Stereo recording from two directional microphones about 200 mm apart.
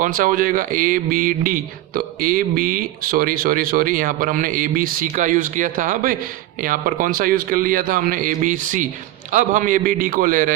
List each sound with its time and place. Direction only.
0.0 s a man's voice: 45° right (ahead or behind)